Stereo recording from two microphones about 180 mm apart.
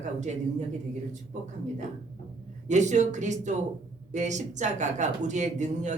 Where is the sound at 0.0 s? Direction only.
40° right (ahead or behind).